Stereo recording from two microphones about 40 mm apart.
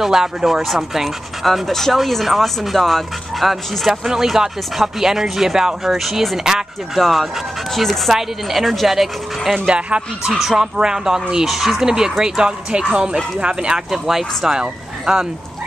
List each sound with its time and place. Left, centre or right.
0.0 s speech: centre
1.4 s speech: centre
7.0 s speech: centre
8.1 s speech: centre
9.7 s speech: right
10.6 s speech: centre
14.0 s speech: centre